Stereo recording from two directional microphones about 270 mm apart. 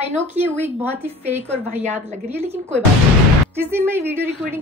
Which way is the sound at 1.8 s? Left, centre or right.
Right.